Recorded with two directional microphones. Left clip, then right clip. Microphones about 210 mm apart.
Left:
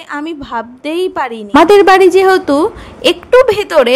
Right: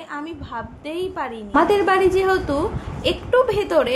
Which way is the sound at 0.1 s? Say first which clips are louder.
Left 11 dB; 50° left (ahead or behind).